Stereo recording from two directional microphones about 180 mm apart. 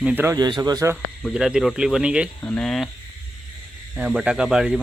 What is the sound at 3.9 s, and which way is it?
Speech, 5° right (ahead or behind).